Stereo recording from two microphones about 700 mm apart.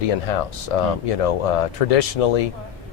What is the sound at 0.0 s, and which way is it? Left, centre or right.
Speech, left.